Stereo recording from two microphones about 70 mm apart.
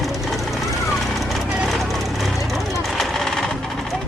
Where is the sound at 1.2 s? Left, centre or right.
Centre.